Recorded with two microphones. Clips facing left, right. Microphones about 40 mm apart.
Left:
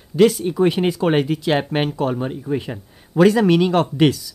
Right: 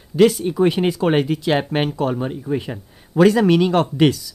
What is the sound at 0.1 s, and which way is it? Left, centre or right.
Speech, centre.